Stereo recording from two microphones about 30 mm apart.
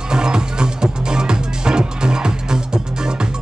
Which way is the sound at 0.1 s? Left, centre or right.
Right.